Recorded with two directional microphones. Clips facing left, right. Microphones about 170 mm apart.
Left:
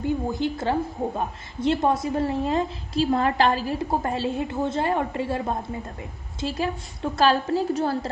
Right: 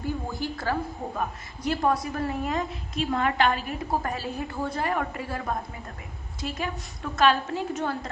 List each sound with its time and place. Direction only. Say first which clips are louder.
0.0 s a woman's voice: left 6 dB; 20° left (ahead or behind)